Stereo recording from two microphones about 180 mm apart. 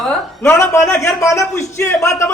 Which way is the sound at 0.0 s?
Centre (ahead or behind).